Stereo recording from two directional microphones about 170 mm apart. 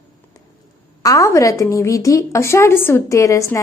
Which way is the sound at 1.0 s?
20° left (ahead or behind).